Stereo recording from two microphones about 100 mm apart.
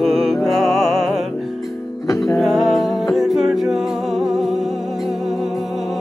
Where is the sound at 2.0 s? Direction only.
35° left (ahead or behind).